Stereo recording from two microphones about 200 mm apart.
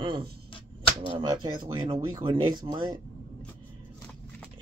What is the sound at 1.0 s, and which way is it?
Speech, 25° right (ahead or behind).